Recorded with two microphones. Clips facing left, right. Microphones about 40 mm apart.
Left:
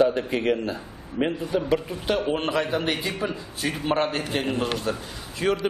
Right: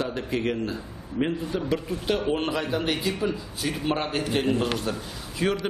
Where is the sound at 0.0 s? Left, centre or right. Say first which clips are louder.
Left 6 dB; centre.